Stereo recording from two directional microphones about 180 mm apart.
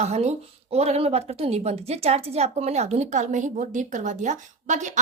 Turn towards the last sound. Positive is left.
turn(degrees=-40)  # may be behind; listen again after turning